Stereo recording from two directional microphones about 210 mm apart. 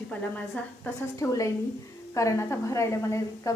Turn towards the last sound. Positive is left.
turn(degrees=15)  # may be behind; listen again after turning